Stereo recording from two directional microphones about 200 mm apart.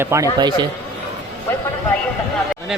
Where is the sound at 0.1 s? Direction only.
20° right (ahead or behind).